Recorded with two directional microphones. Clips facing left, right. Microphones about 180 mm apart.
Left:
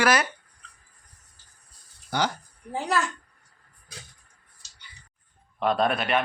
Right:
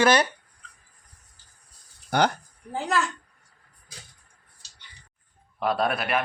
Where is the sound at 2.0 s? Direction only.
60° right (ahead or behind).